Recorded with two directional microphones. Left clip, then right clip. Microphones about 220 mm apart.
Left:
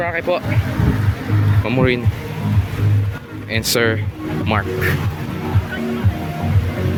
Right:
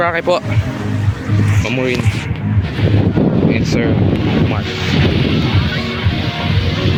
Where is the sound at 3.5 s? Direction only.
25° left (ahead or behind).